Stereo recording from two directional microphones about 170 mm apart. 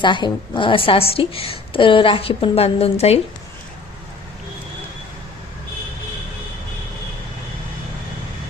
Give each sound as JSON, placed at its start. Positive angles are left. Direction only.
{"t": 0.0, "sound": "a woman's voice", "side_deg": 30}